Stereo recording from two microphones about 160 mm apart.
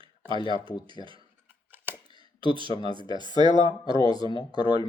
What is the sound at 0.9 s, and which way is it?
Speech, 30° right (ahead or behind).